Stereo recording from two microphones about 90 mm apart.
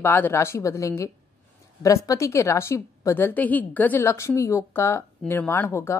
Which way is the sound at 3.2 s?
20° left (ahead or behind).